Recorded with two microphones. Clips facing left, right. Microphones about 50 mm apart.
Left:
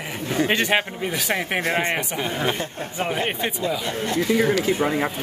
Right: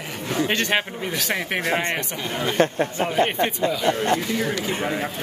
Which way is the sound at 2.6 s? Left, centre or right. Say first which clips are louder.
Right 11 dB; right.